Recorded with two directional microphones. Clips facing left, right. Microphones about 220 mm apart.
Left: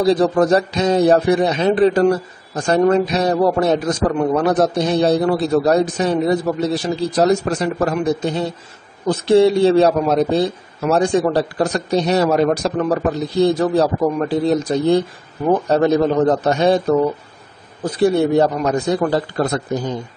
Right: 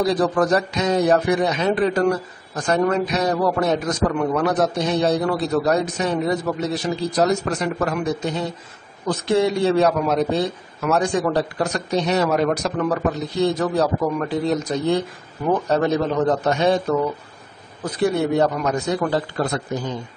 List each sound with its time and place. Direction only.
0.0 s speech: 25° left (ahead or behind)
16.4 s speech: 35° left (ahead or behind)
17.8 s speech: 30° left (ahead or behind)